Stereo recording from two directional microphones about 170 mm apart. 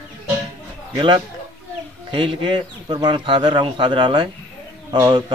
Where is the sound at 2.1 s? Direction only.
30° right (ahead or behind).